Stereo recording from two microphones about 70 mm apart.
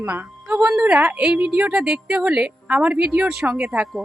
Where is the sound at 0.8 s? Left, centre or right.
Right.